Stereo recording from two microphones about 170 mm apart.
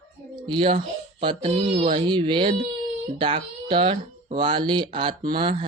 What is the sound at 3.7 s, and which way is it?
Speech, 30° right (ahead or behind).